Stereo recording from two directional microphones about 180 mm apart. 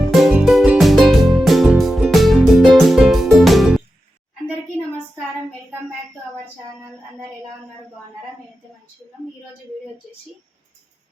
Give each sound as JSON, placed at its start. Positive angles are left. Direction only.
{"t": 0.1, "sound": "music", "side_deg": 0}